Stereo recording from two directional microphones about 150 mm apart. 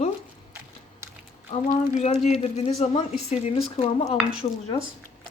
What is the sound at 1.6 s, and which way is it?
Speech, 50° left (ahead or behind).